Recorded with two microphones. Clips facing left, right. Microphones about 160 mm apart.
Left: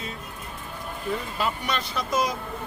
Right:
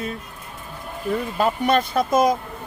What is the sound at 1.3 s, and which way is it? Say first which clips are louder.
Speech: right 9 dB; 50° right (ahead or behind).